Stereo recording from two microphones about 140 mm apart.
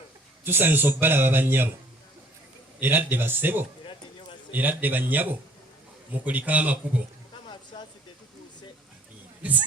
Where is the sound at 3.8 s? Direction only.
35° left (ahead or behind).